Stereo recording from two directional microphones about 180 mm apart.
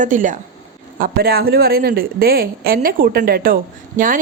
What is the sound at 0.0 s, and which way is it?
Speech, 45° right (ahead or behind).